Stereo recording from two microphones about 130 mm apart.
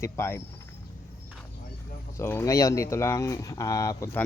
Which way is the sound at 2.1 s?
20° left (ahead or behind).